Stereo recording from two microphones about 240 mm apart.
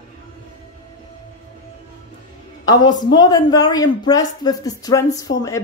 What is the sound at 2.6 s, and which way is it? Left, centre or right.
A woman's voice, centre.